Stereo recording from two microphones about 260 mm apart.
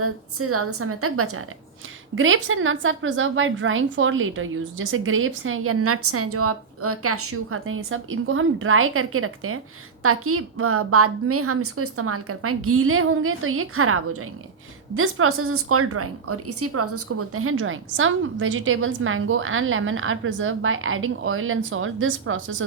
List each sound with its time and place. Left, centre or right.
0.0 s a woman's voice: right